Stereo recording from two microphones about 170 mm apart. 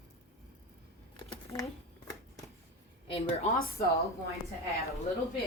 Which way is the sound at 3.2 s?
35° left (ahead or behind).